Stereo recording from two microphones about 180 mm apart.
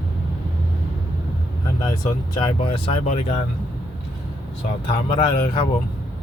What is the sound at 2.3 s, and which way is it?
Speech, 25° left (ahead or behind).